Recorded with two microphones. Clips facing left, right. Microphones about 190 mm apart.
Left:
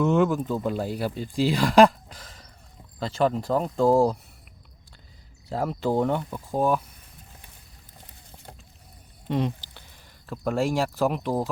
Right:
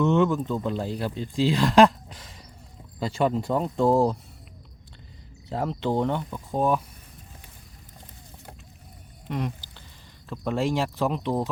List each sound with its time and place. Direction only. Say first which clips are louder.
0.0 s speech: even; 5° left (ahead or behind)
5.5 s speech: left 1 dB; centre (ahead or behind)
9.3 s speech: left 4 dB; 30° left (ahead or behind)
10.2 s speech: left 1 dB; 5° left (ahead or behind)